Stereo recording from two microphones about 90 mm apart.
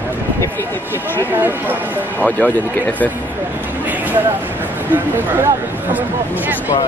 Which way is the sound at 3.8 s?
20° right (ahead or behind).